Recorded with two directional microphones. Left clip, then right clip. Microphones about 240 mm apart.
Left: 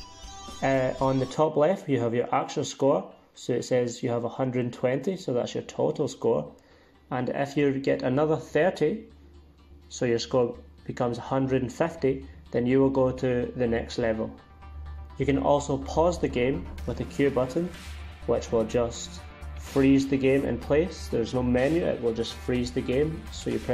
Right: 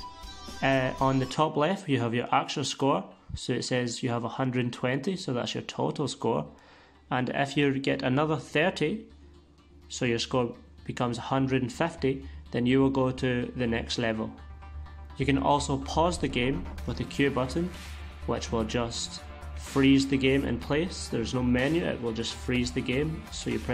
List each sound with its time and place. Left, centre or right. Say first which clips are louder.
0.6 s speech: left 1 dB; right
15.1 s speech: left 2 dB; right